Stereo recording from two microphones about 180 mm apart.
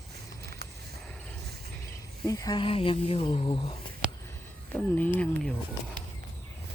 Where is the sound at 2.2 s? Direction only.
20° left (ahead or behind).